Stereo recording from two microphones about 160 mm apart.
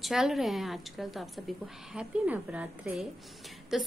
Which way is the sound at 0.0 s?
Centre (ahead or behind).